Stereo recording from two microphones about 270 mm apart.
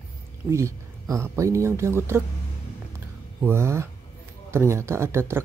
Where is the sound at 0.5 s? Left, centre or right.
Centre.